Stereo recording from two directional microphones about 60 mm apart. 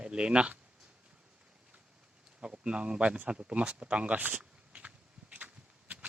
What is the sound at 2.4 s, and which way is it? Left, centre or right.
Speech, centre.